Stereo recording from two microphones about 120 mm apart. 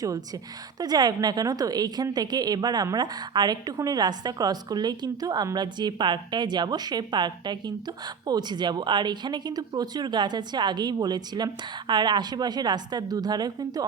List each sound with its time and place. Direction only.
0.8 s a woman's voice: 35° right (ahead or behind)